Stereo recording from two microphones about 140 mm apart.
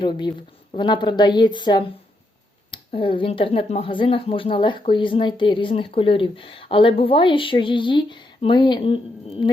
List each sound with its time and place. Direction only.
0.0 s speech: 35° left (ahead or behind)